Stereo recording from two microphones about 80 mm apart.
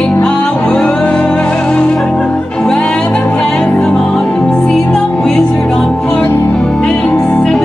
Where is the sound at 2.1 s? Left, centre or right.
Centre.